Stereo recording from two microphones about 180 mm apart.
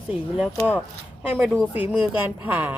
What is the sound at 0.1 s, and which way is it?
Speech, 5° right (ahead or behind).